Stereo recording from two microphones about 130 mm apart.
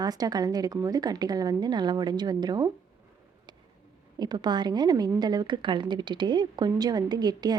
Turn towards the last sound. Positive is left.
turn(degrees=-30)  # may be behind; listen again after turning